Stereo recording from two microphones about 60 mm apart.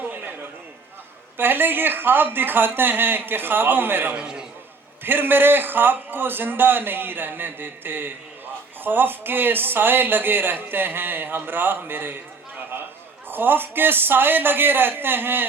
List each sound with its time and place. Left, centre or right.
1.4 s speech: right
4.1 s a man's voice: centre
5.0 s speech: right
13.3 s speech: right